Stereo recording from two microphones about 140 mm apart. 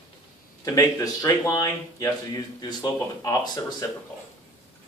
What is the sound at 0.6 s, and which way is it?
Speech, 25° left (ahead or behind).